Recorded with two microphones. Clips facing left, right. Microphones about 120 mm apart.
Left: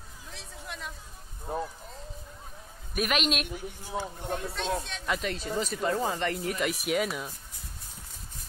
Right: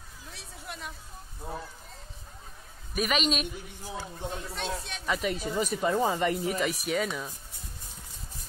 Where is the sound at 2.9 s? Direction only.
Centre (ahead or behind).